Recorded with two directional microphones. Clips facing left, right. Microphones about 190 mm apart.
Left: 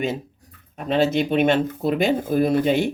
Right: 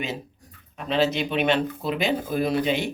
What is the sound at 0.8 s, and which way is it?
Speech, 50° left (ahead or behind).